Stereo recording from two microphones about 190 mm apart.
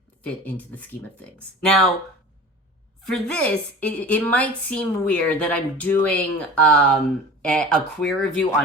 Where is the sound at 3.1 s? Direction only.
5° left (ahead or behind).